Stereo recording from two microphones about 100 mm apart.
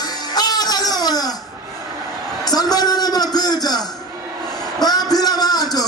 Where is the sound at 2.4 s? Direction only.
40° left (ahead or behind).